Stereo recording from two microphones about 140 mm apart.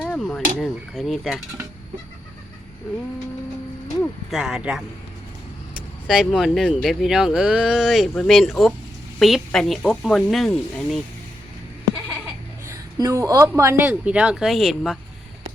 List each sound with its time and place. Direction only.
0.0 s speech: 5° left (ahead or behind)
4.3 s speech: 5° right (ahead or behind)
12.6 s a sound: 20° right (ahead or behind)
13.6 s a woman's voice: 15° right (ahead or behind)